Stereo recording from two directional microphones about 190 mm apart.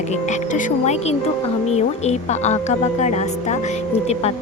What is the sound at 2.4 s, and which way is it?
Speech, 35° left (ahead or behind).